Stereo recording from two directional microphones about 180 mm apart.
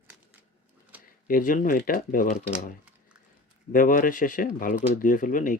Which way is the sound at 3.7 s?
50° left (ahead or behind).